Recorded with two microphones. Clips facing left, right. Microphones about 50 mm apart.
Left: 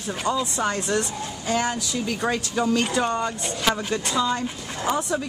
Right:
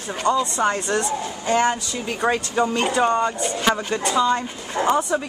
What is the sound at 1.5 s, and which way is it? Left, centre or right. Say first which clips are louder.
Speech: right 5 dB; centre.